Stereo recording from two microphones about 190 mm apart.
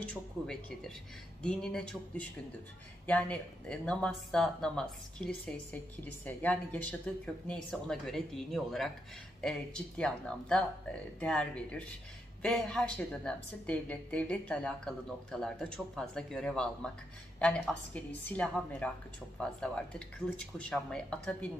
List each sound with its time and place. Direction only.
0.0 s a woman's voice: 5° left (ahead or behind)